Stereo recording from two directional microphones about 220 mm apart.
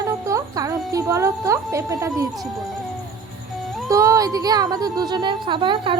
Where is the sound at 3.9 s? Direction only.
15° right (ahead or behind).